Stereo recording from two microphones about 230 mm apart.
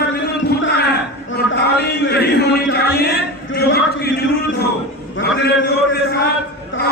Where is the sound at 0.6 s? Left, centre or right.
Left.